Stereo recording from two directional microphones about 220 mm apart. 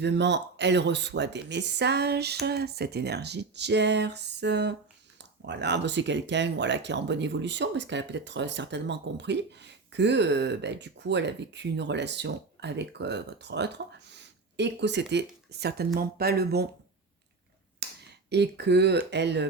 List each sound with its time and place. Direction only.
0.0 s speech: 50° right (ahead or behind)
17.8 s finger snapping: 50° right (ahead or behind)
18.3 s speech: 50° right (ahead or behind)